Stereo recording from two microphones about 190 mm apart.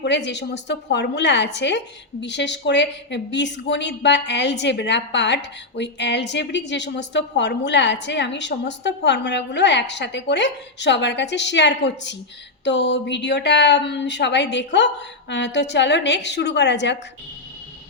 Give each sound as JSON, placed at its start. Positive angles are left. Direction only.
{"t": 0.0, "sound": "a woman's voice", "side_deg": 65}